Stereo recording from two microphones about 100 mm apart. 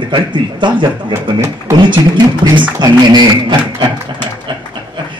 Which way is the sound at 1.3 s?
30° right (ahead or behind).